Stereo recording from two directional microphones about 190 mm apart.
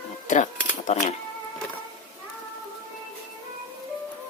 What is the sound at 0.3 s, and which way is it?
Speech, 40° left (ahead or behind).